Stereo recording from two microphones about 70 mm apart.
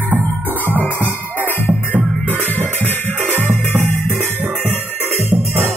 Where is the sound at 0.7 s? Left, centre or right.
Left.